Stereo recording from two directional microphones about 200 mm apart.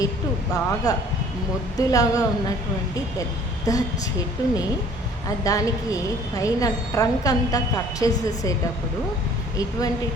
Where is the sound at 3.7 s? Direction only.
15° left (ahead or behind).